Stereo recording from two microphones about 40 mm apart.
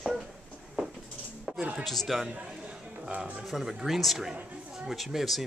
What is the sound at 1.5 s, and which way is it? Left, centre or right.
Chopping, centre.